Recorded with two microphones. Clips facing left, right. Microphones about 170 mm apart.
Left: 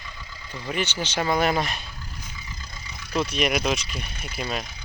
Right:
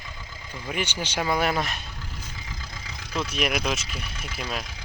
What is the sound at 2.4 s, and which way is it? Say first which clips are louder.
Vehicle: right 2 dB; 90° right.